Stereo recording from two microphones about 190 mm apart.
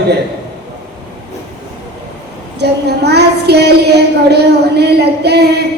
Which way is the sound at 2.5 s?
60° right (ahead or behind).